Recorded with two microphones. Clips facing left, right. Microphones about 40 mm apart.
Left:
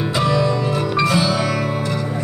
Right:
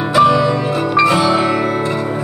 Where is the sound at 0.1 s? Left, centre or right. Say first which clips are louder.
Right 8 dB; right.